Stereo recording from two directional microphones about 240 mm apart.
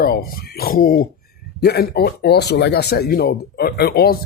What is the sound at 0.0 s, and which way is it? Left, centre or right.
Speech, left.